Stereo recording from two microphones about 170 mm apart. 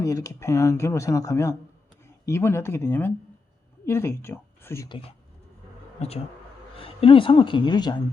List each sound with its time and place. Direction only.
0.0 s speech: 20° left (ahead or behind)
6.0 s a woman's voice: 40° left (ahead or behind)